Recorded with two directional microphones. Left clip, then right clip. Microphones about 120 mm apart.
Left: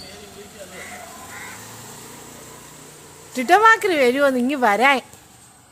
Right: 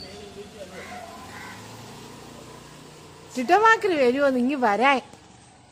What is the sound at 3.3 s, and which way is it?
Speech, 20° left (ahead or behind).